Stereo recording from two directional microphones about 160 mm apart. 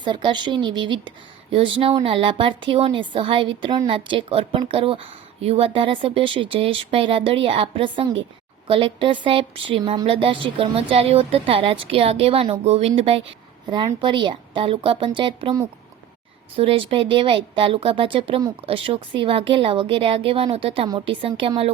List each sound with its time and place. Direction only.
0.0 s speech: 30° right (ahead or behind)
16.6 s speech: 35° right (ahead or behind)